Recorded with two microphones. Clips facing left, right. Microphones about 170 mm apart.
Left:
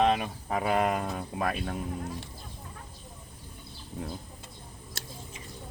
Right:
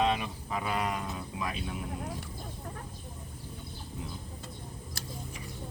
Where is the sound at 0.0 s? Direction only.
50° left (ahead or behind).